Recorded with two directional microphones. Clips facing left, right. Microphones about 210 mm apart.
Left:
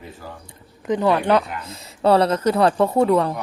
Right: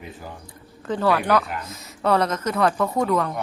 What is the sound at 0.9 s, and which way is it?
Speech, 20° left (ahead or behind).